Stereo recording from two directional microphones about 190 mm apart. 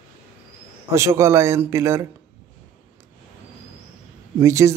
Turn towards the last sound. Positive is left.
turn(degrees=-15)  # may be behind; listen again after turning